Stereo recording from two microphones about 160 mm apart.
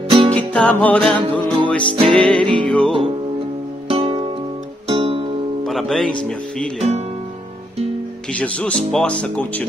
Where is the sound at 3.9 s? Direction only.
35° right (ahead or behind).